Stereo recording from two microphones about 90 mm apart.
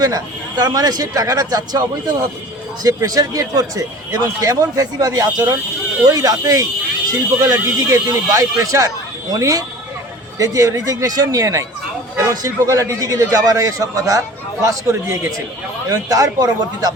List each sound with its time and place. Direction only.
0.0 s speech: 45° right (ahead or behind)